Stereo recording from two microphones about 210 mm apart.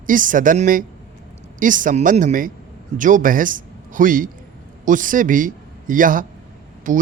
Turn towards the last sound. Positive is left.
turn(degrees=-40)  # may be behind; listen again after turning